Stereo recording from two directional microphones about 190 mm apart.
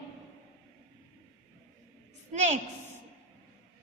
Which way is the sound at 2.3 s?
35° right (ahead or behind).